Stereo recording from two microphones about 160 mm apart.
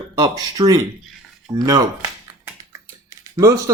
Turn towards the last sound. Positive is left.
turn(degrees=-20)  # may be behind; listen again after turning